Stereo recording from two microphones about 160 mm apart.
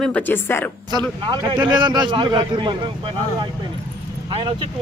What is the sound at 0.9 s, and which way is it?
A man's voice, 25° right (ahead or behind).